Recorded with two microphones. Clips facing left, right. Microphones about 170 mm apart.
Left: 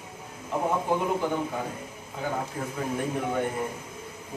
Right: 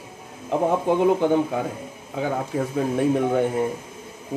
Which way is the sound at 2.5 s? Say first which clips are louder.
Right 9 dB; 90° right.